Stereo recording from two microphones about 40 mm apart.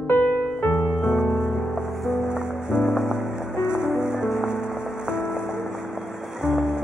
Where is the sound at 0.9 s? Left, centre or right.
Centre.